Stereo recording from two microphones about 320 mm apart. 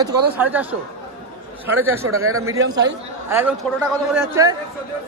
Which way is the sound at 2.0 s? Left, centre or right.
Right.